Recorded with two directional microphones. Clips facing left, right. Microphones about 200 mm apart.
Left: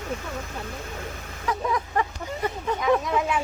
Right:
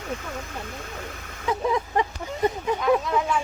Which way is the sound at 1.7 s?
25° right (ahead or behind).